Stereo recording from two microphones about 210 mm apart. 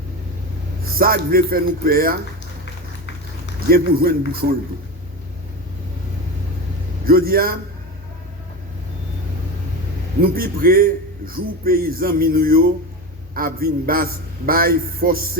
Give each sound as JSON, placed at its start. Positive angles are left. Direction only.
{"t": 0.9, "sound": "a man's voice", "side_deg": -45}
{"t": 3.7, "sound": "a man's voice", "side_deg": -45}
{"t": 7.0, "sound": "a man's voice", "side_deg": -45}
{"t": 10.2, "sound": "a man's voice", "side_deg": -45}